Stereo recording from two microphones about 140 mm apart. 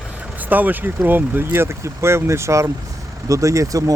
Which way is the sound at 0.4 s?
10° right (ahead or behind).